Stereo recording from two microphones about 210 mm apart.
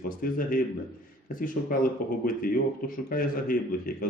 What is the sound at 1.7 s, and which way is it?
A man's voice, 45° left (ahead or behind).